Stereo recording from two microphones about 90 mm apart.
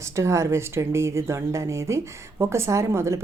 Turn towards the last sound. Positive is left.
turn(degrees=-30)  # may be behind; listen again after turning